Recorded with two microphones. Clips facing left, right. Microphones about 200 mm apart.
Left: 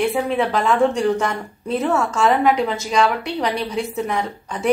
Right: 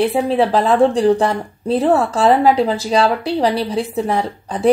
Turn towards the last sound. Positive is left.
turn(degrees=-35)  # may be behind; listen again after turning